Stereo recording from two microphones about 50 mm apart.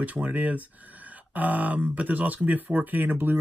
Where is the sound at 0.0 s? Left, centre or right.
Right.